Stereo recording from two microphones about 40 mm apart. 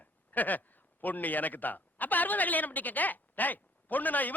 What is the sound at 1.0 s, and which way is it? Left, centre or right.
A woman's voice, left.